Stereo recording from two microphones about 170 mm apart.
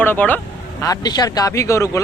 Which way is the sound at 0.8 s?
20° left (ahead or behind).